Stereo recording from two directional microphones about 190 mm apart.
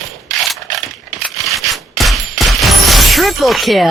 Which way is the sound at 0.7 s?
45° right (ahead or behind).